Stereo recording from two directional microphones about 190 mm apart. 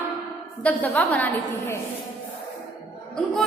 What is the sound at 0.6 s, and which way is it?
A woman's voice, 10° left (ahead or behind).